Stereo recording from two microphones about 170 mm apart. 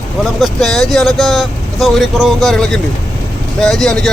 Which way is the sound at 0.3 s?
Centre (ahead or behind).